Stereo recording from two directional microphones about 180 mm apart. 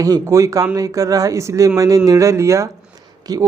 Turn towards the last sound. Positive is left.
turn(degrees=-20)  # may be behind; listen again after turning